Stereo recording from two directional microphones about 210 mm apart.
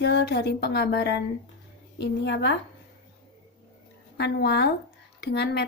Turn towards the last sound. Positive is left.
turn(degrees=55)  # may be behind; listen again after turning